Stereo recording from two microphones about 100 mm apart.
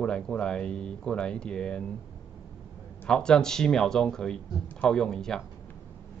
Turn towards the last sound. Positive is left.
turn(degrees=5)  # may be behind; listen again after turning